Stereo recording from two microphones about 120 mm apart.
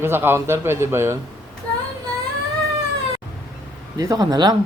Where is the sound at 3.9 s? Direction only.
30° right (ahead or behind).